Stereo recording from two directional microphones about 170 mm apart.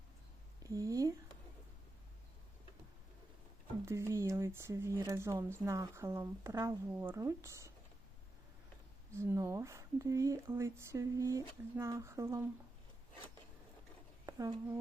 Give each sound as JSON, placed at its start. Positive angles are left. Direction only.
{"t": 0.6, "sound": "a sound", "side_deg": -20}
{"t": 3.8, "sound": "speech", "side_deg": -15}
{"t": 9.1, "sound": "speech", "side_deg": -15}
{"t": 14.3, "sound": "speech", "side_deg": -20}